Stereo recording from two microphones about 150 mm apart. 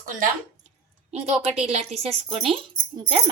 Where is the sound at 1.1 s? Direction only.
45° right (ahead or behind).